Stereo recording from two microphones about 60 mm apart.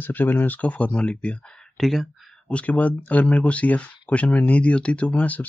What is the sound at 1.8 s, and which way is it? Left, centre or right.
Speech, centre.